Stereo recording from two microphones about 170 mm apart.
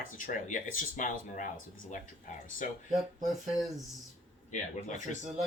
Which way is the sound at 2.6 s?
50° left (ahead or behind).